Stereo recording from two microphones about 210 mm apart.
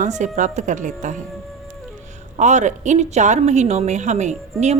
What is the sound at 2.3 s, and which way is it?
A woman's voice, 35° right (ahead or behind).